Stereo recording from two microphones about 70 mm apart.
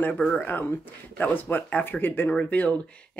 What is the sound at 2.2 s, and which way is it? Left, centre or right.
Speech, centre.